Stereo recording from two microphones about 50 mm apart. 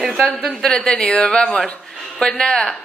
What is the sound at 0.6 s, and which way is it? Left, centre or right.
A man's voice, centre.